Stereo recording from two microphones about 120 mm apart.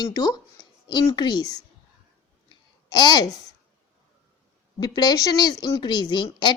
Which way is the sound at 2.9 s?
35° left (ahead or behind).